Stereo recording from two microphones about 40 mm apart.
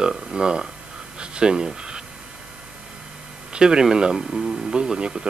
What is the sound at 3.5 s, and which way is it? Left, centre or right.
Speech, centre.